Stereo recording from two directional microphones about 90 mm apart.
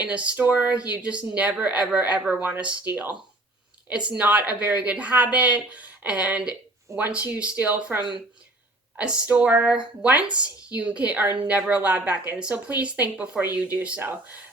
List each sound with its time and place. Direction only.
0.0 s speech: 15° right (ahead or behind)